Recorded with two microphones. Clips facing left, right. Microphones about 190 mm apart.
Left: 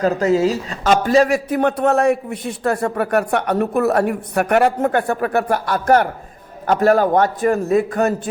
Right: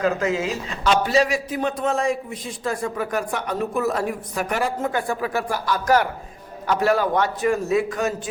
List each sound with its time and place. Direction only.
0.0 s a man's voice: 40° left (ahead or behind); by 8.3 s 55° left (ahead or behind)